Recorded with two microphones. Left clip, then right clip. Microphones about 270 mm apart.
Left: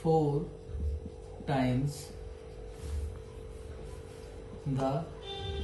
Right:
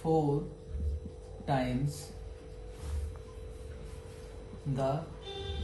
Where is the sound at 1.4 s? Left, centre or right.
Centre.